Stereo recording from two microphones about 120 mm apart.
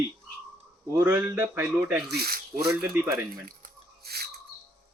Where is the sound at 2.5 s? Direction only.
70° right (ahead or behind).